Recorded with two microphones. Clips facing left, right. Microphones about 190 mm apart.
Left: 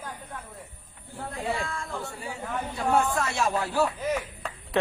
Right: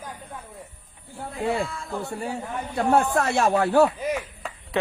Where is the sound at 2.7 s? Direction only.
60° right (ahead or behind).